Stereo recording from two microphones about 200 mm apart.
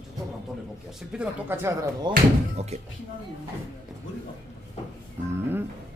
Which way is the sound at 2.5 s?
35° right (ahead or behind).